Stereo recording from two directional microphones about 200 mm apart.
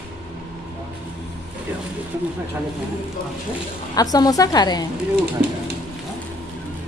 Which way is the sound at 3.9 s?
20° left (ahead or behind).